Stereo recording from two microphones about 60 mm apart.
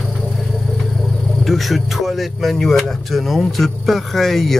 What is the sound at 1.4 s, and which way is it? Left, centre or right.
Speech, centre.